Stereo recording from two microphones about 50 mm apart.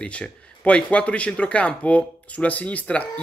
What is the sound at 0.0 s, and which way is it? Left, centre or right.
Speech, left.